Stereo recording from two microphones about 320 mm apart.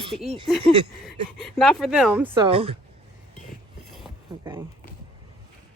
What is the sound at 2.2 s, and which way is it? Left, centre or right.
Speech, centre.